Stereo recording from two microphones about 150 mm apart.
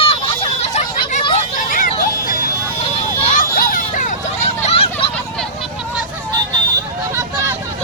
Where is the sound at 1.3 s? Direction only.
65° left (ahead or behind).